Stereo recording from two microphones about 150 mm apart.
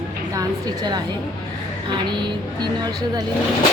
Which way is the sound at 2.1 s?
30° right (ahead or behind).